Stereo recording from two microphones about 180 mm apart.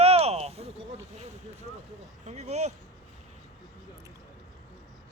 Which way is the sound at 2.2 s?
40° right (ahead or behind).